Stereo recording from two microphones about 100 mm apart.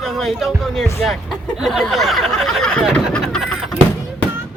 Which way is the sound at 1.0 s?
Centre (ahead or behind).